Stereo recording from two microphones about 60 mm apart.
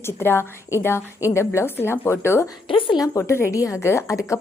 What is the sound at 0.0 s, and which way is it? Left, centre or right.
A woman's voice, left.